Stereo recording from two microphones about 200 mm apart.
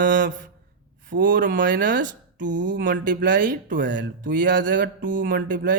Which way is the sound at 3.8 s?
65° right (ahead or behind).